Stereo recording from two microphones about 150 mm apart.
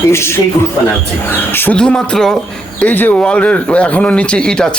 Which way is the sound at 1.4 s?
15° left (ahead or behind).